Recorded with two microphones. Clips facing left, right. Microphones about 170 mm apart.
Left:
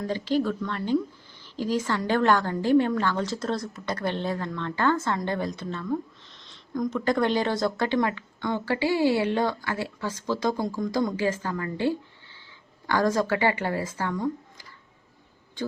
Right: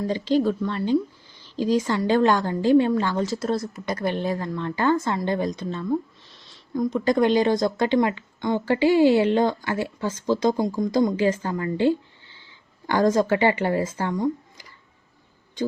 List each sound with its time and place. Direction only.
0.1 s speech: 15° right (ahead or behind)